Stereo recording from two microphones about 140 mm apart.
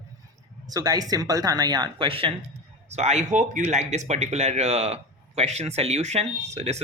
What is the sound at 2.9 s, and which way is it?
Speech, 50° right (ahead or behind).